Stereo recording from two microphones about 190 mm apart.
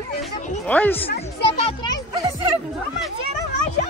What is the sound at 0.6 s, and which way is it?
Speech, 10° left (ahead or behind).